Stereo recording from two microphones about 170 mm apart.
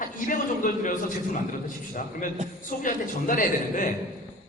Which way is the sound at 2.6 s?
50° left (ahead or behind).